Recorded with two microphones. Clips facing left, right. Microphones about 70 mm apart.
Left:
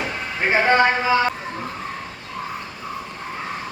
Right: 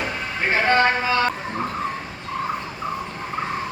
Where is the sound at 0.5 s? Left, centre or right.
Centre.